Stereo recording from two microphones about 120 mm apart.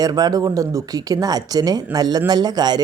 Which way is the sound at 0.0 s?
35° right (ahead or behind).